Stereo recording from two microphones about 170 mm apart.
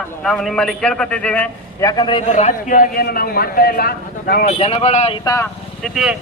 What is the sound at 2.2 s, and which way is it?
A man's voice, 45° left (ahead or behind).